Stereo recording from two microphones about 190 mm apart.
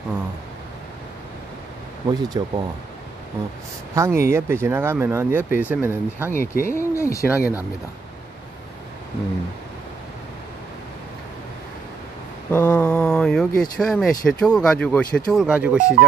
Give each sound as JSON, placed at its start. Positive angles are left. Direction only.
{"t": 2.0, "sound": "speech", "side_deg": -20}
{"t": 3.9, "sound": "speech", "side_deg": -15}
{"t": 6.4, "sound": "speech", "side_deg": 45}
{"t": 6.7, "sound": "speech", "side_deg": 15}
{"t": 7.2, "sound": "speech", "side_deg": -10}
{"t": 12.4, "sound": "a sound", "side_deg": 10}
{"t": 13.6, "sound": "speech", "side_deg": 0}